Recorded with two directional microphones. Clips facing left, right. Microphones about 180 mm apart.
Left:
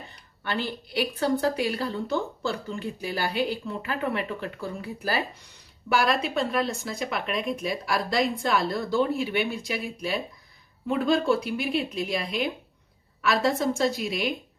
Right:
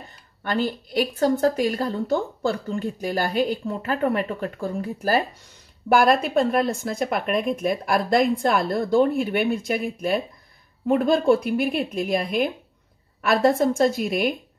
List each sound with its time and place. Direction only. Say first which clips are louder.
0.4 s a woman's voice: right 6 dB; 45° right (ahead or behind)